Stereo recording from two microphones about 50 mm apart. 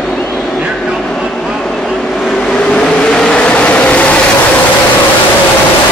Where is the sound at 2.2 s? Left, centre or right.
Centre.